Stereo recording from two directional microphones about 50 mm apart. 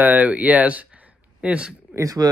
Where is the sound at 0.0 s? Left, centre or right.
Right.